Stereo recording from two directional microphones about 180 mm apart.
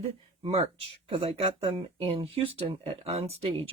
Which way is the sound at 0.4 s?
35° right (ahead or behind).